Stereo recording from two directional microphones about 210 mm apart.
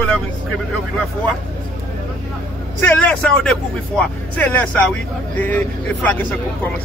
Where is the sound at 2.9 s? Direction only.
5° left (ahead or behind).